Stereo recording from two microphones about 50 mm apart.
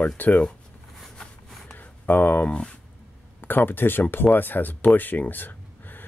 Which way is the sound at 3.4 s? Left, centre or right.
Left.